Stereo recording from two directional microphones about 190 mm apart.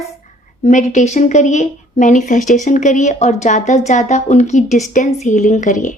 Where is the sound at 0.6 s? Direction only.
40° left (ahead or behind).